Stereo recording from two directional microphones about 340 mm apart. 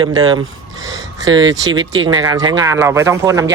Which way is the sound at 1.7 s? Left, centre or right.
Right.